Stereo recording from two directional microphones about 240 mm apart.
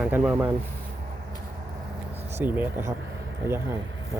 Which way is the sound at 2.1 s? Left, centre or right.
Centre.